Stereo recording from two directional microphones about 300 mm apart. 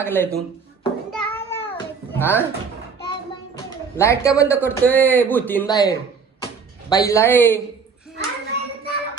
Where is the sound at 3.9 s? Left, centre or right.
Centre.